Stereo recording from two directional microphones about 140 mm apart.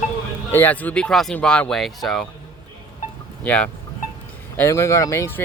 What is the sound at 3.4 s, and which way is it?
Speech, 10° left (ahead or behind).